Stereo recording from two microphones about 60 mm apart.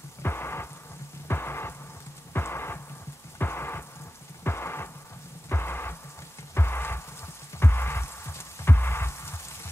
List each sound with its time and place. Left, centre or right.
0.2 s thunder: left
1.2 s music: left
4.5 s rain: left
6.5 s music: left